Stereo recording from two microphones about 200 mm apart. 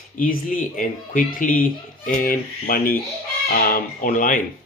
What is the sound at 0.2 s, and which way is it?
Speech, 45° left (ahead or behind).